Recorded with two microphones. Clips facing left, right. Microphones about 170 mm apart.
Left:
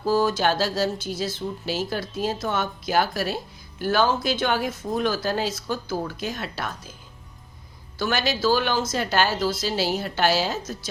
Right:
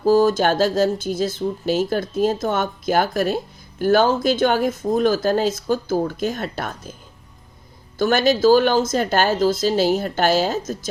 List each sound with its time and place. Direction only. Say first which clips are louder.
0.0 s speech: right 6 dB; 45° right (ahead or behind)
7.9 s speech: right 8 dB; 50° right (ahead or behind)